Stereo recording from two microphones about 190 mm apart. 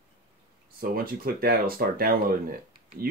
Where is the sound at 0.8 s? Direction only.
50° right (ahead or behind).